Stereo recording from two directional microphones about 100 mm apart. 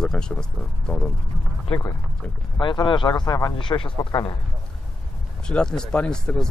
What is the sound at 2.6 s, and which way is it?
Speech, 50° left (ahead or behind).